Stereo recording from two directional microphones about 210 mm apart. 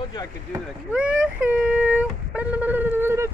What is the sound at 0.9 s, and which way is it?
Speech, 5° right (ahead or behind).